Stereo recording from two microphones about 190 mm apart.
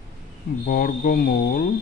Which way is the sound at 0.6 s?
50° left (ahead or behind).